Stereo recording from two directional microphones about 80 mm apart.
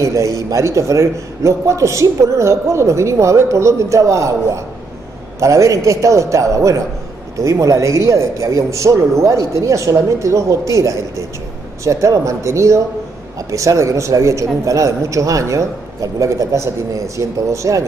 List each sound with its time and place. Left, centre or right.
0.0 s a man's voice: right